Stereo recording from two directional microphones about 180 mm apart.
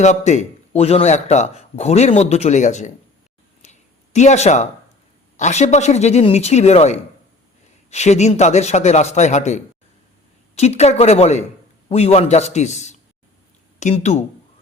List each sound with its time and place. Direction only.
0.0 s a man's voice: 40° left (ahead or behind)
3.6 s a sound: 40° left (ahead or behind)
5.4 s a man's voice: 40° left (ahead or behind)